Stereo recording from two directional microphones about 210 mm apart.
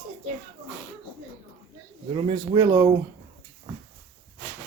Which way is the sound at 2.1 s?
20° right (ahead or behind).